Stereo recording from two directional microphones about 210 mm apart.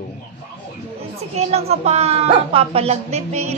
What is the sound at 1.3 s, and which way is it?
A woman's voice, 30° right (ahead or behind).